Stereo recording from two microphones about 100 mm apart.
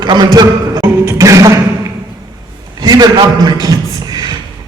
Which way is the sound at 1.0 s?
30° right (ahead or behind).